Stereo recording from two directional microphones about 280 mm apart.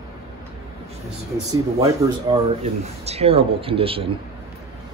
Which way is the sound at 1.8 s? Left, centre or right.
Centre.